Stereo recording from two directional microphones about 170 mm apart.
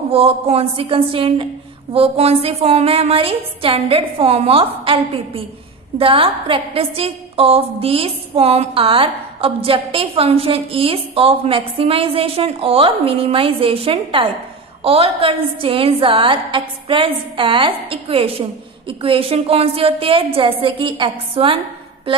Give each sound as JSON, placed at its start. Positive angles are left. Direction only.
{"t": 0.1, "sound": "a woman's voice", "side_deg": -35}